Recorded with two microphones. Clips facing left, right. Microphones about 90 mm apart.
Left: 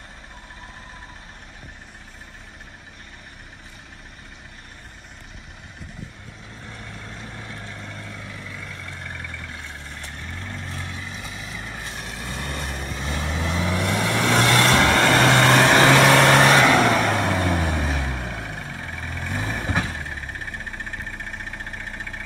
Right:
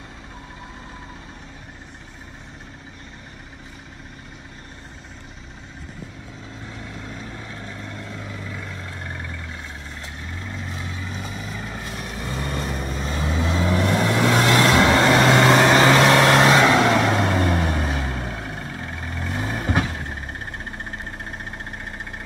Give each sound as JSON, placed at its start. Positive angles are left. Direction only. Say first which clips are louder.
{"t": 6.9, "sound": "vehicle", "louder": "right 3 dB", "side_deg": -15}
{"t": 10.4, "sound": "vehicle", "louder": "right 2 dB", "side_deg": -10}
{"t": 10.9, "sound": "vehicle", "louder": "right 2 dB", "side_deg": -25}
{"t": 11.1, "sound": "vehicle", "louder": "right 3 dB", "side_deg": -40}
{"t": 14.2, "sound": "vehicle", "louder": "even", "side_deg": -15}
{"t": 21.5, "sound": "vehicle", "louder": "even", "side_deg": -20}